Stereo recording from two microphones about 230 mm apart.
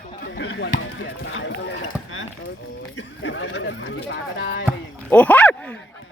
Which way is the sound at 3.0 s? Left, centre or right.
Left.